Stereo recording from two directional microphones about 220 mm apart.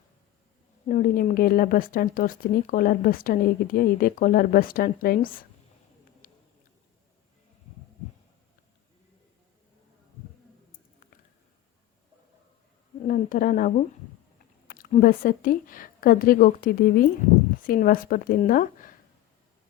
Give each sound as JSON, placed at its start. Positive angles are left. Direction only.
{"t": 0.9, "sound": "speech", "side_deg": 40}
{"t": 6.2, "sound": "a sound", "side_deg": 40}
{"t": 13.1, "sound": "speech", "side_deg": 40}